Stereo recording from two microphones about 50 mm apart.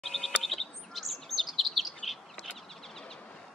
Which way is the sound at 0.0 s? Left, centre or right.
Centre.